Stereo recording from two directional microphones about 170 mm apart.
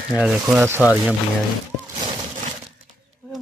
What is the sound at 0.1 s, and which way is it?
Speech, 5° right (ahead or behind).